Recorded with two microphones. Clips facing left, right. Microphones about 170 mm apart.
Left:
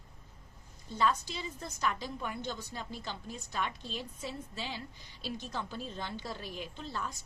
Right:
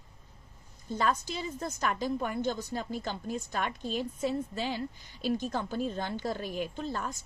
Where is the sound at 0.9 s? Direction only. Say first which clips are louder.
Right 1 dB; 45° right (ahead or behind).